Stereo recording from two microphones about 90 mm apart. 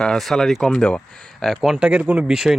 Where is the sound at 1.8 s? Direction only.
15° right (ahead or behind).